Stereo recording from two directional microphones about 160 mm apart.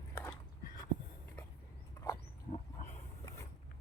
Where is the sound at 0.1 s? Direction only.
15° left (ahead or behind).